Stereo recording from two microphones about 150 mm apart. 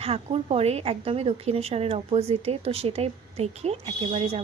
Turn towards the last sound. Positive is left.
turn(degrees=-40)  # may be behind; listen again after turning